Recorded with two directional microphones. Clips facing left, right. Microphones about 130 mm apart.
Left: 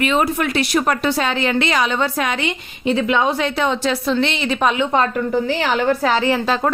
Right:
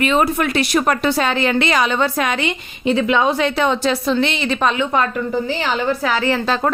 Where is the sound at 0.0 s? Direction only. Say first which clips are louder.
Right 1 dB; 40° right (ahead or behind); by 2.4 s 65° right (ahead or behind).